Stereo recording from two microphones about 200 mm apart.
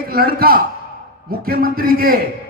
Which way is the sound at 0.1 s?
50° right (ahead or behind).